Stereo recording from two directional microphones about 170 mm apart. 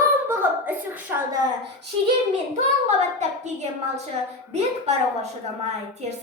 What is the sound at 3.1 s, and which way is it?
A woman's voice, 40° right (ahead or behind).